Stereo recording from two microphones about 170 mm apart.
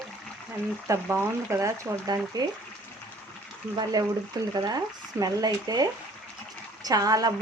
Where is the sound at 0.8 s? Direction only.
15° right (ahead or behind).